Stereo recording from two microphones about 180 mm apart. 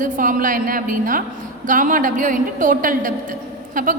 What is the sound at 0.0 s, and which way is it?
A woman's voice, 50° right (ahead or behind).